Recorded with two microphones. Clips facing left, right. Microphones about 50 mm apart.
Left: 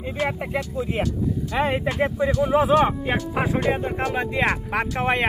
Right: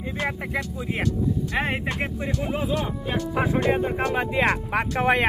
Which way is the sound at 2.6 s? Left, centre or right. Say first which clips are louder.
Left 10 dB; left.